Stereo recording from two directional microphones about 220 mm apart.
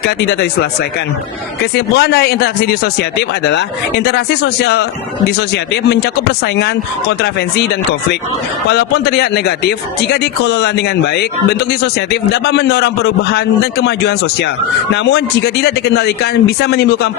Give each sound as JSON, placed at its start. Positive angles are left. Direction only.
{"t": 0.0, "sound": "speech", "side_deg": 50}
{"t": 1.7, "sound": "speech", "side_deg": 50}